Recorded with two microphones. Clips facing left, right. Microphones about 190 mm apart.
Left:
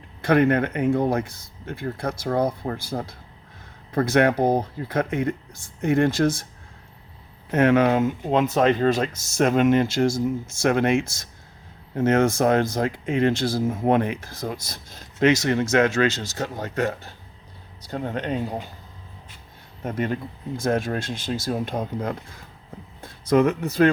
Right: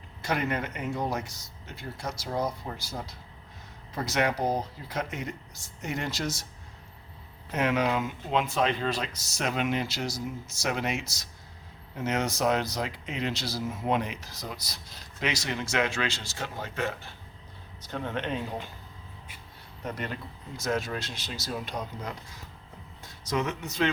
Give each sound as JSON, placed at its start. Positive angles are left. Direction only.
{"t": 0.2, "sound": "speech", "side_deg": 55}
{"t": 7.5, "sound": "speech", "side_deg": 55}
{"t": 19.8, "sound": "speech", "side_deg": 50}